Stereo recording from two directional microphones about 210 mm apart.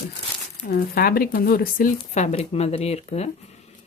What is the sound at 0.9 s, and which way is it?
Speech, 45° left (ahead or behind).